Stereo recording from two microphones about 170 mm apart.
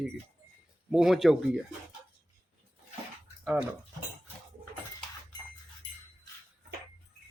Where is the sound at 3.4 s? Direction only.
5° right (ahead or behind).